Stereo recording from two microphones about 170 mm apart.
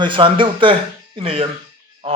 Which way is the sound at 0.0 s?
30° right (ahead or behind).